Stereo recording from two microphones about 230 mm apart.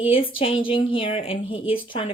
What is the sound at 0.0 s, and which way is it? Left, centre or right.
Speech, left.